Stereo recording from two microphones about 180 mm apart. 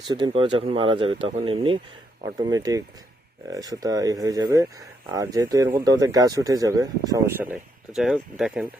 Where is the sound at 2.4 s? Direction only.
20° right (ahead or behind).